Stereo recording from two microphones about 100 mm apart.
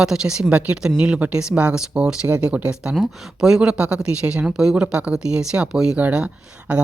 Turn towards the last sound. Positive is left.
turn(degrees=-10)  # may be behind; listen again after turning